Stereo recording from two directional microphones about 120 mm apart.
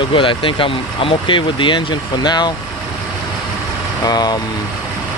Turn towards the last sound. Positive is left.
turn(degrees=35)  # may be behind; listen again after turning